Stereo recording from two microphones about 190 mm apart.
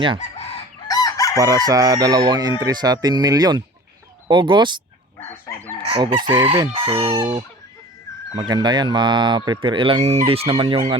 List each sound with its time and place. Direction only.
0.9 s chicken: 20° left (ahead or behind)
1.4 s speech: 20° right (ahead or behind)
5.8 s speech: 30° right (ahead or behind)
8.4 s speech: 20° right (ahead or behind)